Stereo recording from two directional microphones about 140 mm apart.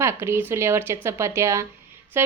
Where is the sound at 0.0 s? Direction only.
20° right (ahead or behind).